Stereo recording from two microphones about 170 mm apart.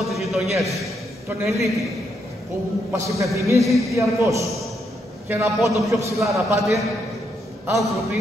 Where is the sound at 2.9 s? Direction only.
15° right (ahead or behind).